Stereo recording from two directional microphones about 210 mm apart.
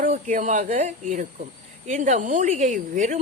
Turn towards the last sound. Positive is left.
turn(degrees=-35)  # may be behind; listen again after turning